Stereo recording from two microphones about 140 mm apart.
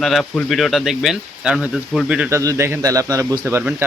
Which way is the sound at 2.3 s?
20° right (ahead or behind).